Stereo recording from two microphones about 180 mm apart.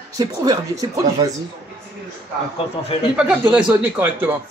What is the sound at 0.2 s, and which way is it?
Speech, 20° right (ahead or behind).